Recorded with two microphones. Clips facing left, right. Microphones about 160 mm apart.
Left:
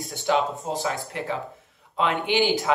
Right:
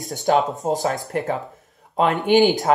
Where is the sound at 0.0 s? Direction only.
40° right (ahead or behind).